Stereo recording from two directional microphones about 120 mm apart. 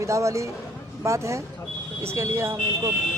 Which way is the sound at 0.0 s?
25° right (ahead or behind).